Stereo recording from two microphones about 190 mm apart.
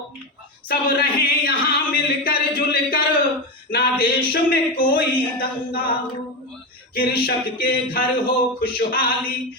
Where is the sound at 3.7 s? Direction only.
55° left (ahead or behind).